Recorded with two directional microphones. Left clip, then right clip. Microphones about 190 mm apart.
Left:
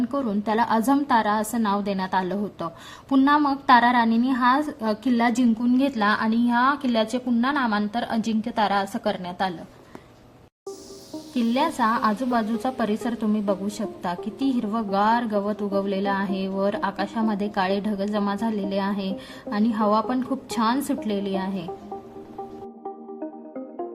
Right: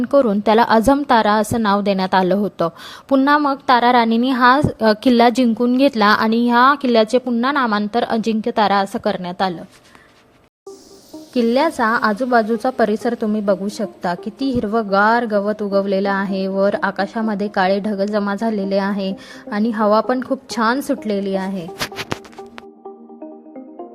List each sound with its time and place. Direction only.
0.1 s a woman's voice: 45° right (ahead or behind)
11.3 s a woman's voice: 35° right (ahead or behind)